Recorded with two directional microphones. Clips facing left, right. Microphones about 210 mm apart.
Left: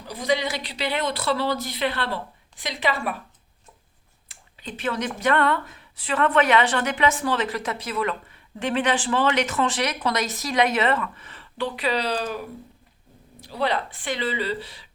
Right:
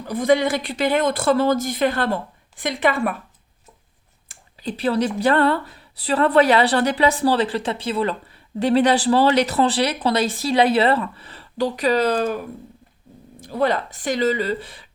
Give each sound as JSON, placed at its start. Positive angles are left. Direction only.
{"t": 0.0, "sound": "speech", "side_deg": -50}
{"t": 4.3, "sound": "speech", "side_deg": -35}
{"t": 13.4, "sound": "speech", "side_deg": -50}